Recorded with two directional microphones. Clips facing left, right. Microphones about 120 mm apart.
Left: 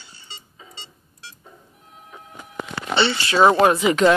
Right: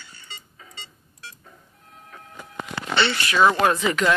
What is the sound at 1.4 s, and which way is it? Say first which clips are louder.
Doorbell: left 3 dB; 15° left (ahead or behind).